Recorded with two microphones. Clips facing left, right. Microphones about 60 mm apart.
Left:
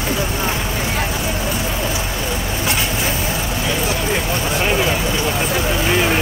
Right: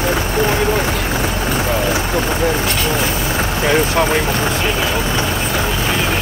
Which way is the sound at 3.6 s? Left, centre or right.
Right.